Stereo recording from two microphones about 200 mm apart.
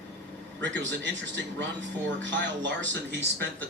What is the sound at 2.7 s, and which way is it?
Speech, 60° right (ahead or behind).